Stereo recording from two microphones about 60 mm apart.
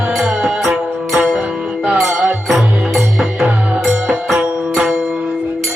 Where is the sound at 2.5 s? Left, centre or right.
Centre.